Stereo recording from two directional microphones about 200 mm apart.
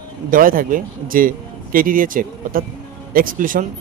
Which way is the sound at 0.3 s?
45° right (ahead or behind).